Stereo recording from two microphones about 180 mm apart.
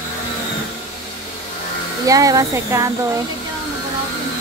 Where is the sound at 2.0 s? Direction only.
20° right (ahead or behind).